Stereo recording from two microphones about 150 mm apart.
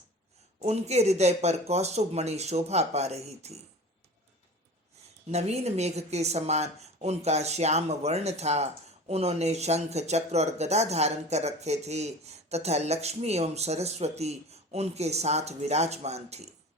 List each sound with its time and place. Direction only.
0.6 s speech: 45° right (ahead or behind)
5.3 s speech: 45° right (ahead or behind)